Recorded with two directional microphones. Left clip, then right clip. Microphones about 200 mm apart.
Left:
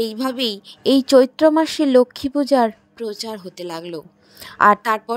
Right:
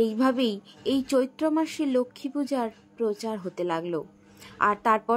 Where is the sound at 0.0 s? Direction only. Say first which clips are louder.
Left 2 dB; 40° left (ahead or behind).